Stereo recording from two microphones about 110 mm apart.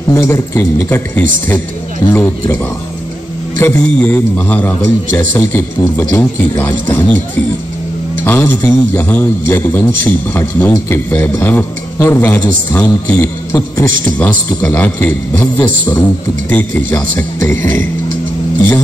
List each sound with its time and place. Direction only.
0.1 s a man's voice: 25° left (ahead or behind)
8.2 s a man's voice: 20° left (ahead or behind)
13.6 s a man's voice: 15° left (ahead or behind)